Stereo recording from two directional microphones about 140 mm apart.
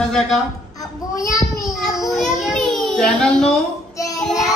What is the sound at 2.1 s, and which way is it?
Child singing, centre (ahead or behind).